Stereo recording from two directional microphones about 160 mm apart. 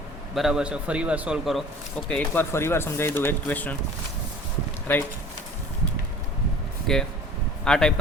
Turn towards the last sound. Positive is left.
turn(degrees=5)  # may be behind; listen again after turning